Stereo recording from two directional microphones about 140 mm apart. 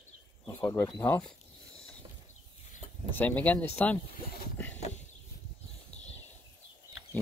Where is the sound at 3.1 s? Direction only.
10° left (ahead or behind).